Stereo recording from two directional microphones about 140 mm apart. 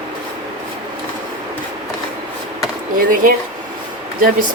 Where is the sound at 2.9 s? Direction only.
80° right.